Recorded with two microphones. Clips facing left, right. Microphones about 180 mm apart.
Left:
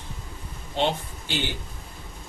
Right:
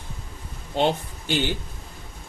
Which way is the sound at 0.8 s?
45° right (ahead or behind).